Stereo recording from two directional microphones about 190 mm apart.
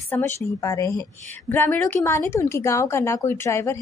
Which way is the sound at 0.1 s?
15° left (ahead or behind).